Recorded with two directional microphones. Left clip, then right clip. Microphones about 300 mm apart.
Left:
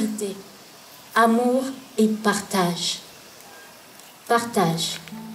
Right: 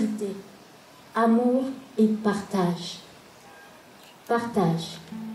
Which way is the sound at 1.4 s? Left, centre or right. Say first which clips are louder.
Left 3 dB; right.